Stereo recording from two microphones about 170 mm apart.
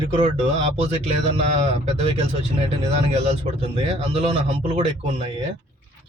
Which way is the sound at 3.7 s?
35° right (ahead or behind).